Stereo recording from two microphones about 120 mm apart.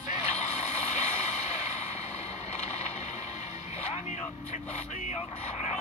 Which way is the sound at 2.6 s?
65° left (ahead or behind).